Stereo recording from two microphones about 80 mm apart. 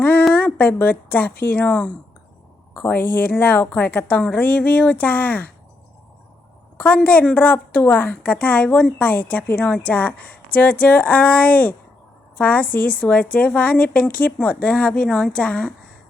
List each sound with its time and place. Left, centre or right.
0.0 s a sound: left
0.3 s speech: left
2.7 s a woman's voice: left
6.7 s a woman's voice: centre